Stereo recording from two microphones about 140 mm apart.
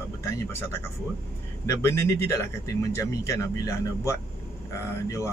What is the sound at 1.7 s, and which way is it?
Speech, 20° left (ahead or behind).